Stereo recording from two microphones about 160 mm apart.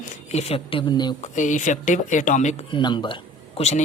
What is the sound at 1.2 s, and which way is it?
Speech, 50° left (ahead or behind).